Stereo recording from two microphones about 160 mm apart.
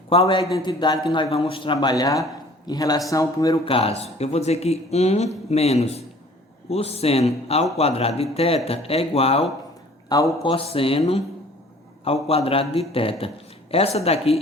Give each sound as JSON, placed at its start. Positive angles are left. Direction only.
{"t": 0.1, "sound": "a man's voice", "side_deg": 35}
{"t": 3.7, "sound": "a man's voice", "side_deg": 40}
{"t": 10.1, "sound": "a man's voice", "side_deg": 25}
{"t": 10.4, "sound": "a man's voice", "side_deg": 35}